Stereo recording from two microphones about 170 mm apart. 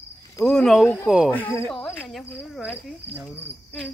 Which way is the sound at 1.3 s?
15° left (ahead or behind).